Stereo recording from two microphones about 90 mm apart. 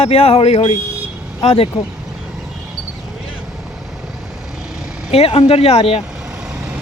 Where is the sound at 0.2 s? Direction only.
90° left.